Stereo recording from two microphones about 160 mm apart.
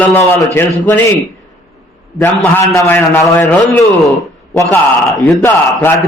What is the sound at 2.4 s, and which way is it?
A man's voice, 15° left (ahead or behind).